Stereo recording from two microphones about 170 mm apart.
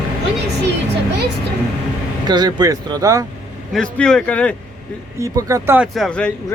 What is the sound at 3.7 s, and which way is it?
Speech, 5° left (ahead or behind).